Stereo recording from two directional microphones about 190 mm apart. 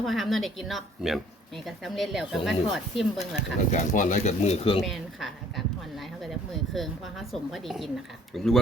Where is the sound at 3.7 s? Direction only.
35° left (ahead or behind).